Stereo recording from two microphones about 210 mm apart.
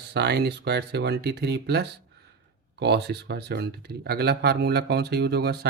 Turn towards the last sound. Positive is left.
turn(degrees=-50)  # may be behind; listen again after turning